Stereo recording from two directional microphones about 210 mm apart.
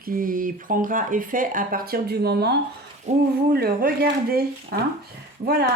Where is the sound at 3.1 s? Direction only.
30° right (ahead or behind).